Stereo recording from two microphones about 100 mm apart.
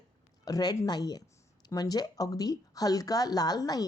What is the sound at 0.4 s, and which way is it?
Speech, 40° left (ahead or behind).